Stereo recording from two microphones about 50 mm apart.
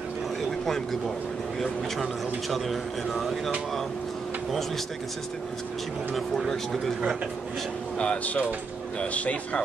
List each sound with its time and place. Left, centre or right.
0.7 s speech: centre
2.5 s speech: centre
6.1 s speech: centre
8.0 s speech: left